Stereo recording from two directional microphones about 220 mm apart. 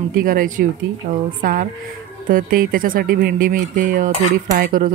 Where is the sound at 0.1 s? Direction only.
40° right (ahead or behind).